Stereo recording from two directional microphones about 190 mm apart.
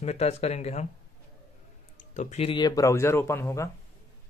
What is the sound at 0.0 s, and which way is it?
Speech, 35° left (ahead or behind).